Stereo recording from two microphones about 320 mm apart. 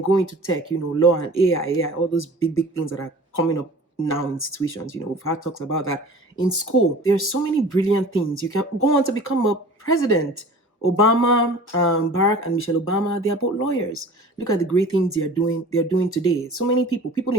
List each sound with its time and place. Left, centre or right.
1.0 s speech: left